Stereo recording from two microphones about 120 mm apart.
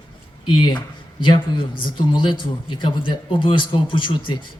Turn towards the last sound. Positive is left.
turn(degrees=45)  # may be behind; listen again after turning